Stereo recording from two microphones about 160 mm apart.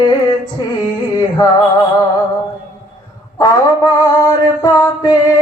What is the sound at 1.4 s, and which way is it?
Music, 20° left (ahead or behind).